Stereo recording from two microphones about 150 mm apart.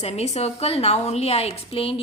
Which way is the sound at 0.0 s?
45° left (ahead or behind).